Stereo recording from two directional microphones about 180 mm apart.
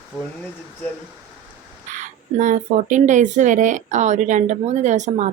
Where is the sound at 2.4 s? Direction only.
45° right (ahead or behind).